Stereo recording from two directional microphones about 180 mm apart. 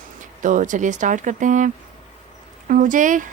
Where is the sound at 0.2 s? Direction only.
45° right (ahead or behind).